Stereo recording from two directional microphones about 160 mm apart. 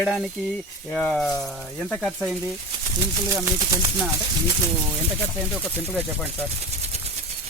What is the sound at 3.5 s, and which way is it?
Speech, 20° right (ahead or behind).